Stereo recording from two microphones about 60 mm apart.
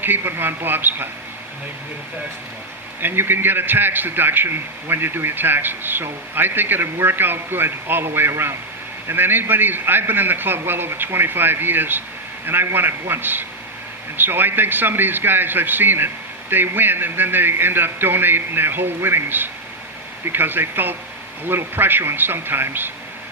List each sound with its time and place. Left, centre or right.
0.0 s a man's voice: right
3.0 s a man's voice: right